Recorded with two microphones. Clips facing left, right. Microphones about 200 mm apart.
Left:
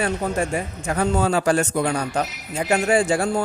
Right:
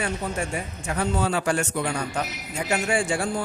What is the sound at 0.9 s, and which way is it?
A man's voice, 45° left (ahead or behind).